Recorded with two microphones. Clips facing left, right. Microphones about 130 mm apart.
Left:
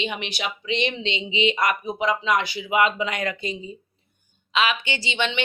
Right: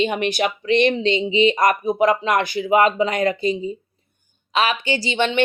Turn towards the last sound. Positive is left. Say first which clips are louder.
# right 6 dB
turn(degrees=-40)  # may be behind; listen again after turning